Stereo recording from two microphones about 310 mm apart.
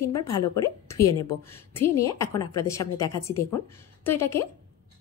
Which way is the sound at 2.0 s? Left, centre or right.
Centre.